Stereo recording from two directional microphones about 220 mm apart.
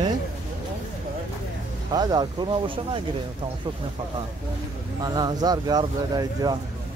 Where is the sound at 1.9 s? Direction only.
20° right (ahead or behind).